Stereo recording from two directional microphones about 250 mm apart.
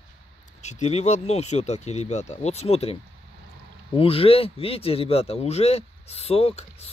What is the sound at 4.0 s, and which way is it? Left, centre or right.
Speech, left.